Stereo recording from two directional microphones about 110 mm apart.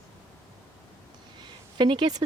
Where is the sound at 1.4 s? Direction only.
45° right (ahead or behind).